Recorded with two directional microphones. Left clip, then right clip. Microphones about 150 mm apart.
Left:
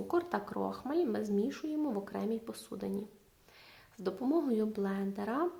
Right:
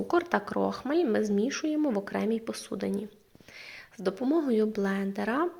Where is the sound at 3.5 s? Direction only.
20° right (ahead or behind).